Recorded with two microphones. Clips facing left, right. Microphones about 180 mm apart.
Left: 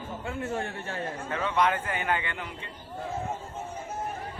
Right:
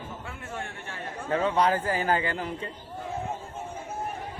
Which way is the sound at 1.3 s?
35° right (ahead or behind).